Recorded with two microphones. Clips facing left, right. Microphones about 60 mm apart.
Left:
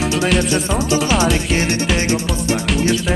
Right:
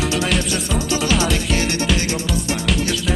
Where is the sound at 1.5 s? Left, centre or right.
Left.